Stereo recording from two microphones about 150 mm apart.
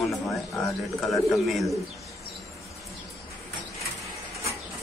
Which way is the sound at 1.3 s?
Centre (ahead or behind).